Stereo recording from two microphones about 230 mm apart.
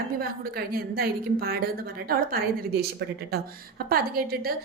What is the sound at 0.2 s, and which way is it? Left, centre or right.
A woman's voice, right.